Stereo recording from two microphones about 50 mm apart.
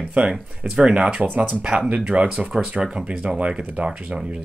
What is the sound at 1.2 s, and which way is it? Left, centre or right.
Speech, right.